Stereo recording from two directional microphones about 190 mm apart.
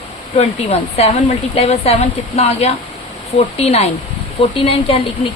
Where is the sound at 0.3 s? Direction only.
30° left (ahead or behind).